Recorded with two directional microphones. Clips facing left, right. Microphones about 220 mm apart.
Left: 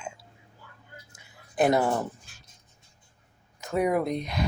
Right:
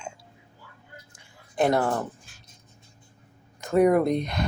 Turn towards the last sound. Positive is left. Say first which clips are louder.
# right 4 dB
turn(degrees=5)  # may be behind; listen again after turning